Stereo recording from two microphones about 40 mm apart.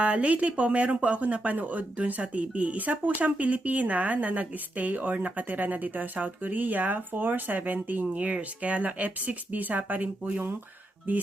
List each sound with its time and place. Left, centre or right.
0.0 s speech: right
8.1 s speech: right